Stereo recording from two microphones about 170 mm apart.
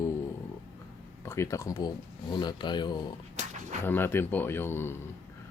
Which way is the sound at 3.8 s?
15° left (ahead or behind).